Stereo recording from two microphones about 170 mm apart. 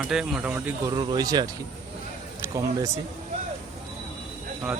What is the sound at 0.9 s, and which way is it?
Speech, 25° right (ahead or behind).